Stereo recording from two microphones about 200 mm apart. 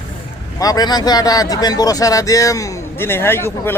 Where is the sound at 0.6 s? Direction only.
20° left (ahead or behind).